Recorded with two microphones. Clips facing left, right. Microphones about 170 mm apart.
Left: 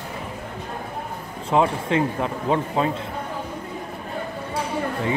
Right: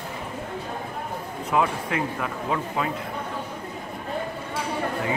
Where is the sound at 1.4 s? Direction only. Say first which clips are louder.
Left 4 dB; 30° left (ahead or behind).